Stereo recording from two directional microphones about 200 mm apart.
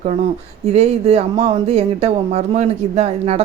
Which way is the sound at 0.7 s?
30° right (ahead or behind).